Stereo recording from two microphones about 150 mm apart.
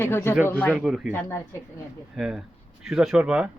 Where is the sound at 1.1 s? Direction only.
15° left (ahead or behind).